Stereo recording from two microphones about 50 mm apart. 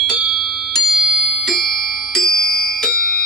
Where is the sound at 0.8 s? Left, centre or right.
Centre.